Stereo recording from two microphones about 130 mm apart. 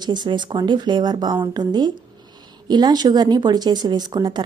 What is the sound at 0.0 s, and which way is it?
Speech, 35° right (ahead or behind).